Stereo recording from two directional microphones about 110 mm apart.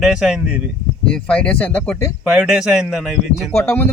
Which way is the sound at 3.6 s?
20° left (ahead or behind).